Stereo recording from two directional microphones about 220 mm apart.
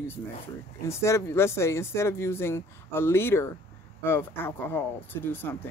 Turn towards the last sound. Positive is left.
turn(degrees=10)  # may be behind; listen again after turning